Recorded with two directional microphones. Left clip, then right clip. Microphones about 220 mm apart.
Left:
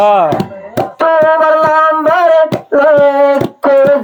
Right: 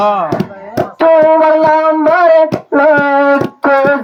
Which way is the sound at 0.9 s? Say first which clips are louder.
Right 2 dB; 45° left (ahead or behind).